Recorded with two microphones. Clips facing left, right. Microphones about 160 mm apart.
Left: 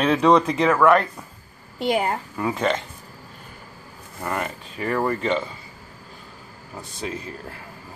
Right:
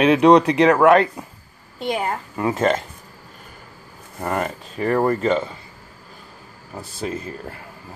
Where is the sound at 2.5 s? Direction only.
45° right (ahead or behind).